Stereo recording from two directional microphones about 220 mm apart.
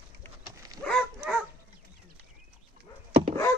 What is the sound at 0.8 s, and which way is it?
Dog, 5° left (ahead or behind).